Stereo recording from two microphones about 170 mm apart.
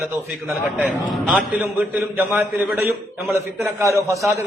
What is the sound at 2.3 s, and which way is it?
A man's voice, 10° right (ahead or behind).